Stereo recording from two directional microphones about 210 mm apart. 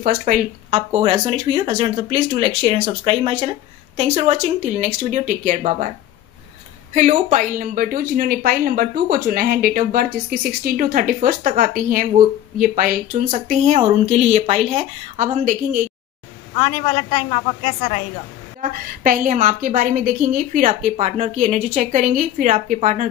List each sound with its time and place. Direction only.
0.0 s speech: 40° right (ahead or behind)
6.9 s a woman's voice: 35° right (ahead or behind)
16.5 s a woman's voice: 25° left (ahead or behind)
18.6 s a woman's voice: 40° right (ahead or behind)